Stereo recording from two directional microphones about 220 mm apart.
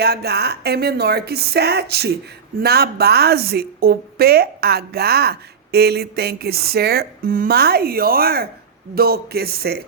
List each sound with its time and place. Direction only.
0.0 s a woman's voice: 45° right (ahead or behind)